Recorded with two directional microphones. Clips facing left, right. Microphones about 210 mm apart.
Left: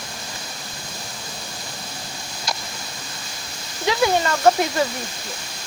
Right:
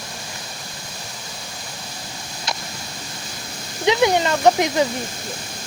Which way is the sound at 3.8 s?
20° right (ahead or behind).